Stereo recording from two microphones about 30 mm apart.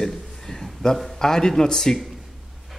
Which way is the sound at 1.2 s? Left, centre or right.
Centre.